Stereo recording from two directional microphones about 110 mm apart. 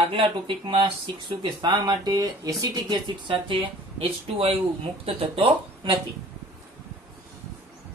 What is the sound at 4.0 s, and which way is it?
Speech, 60° right (ahead or behind).